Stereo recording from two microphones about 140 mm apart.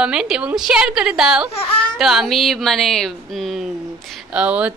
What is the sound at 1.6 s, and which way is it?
Speech, 40° left (ahead or behind).